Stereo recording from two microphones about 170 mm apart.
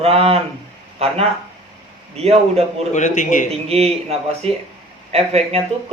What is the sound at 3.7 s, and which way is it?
Speech, 35° right (ahead or behind).